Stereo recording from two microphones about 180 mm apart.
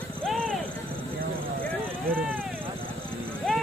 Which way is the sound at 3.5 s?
5° left (ahead or behind).